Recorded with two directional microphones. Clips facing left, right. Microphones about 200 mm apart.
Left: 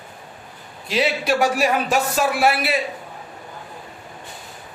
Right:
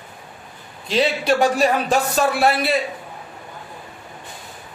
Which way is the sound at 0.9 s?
5° left (ahead or behind).